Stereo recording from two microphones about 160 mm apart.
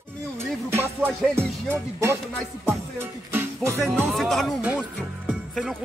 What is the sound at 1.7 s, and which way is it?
Music, 15° right (ahead or behind).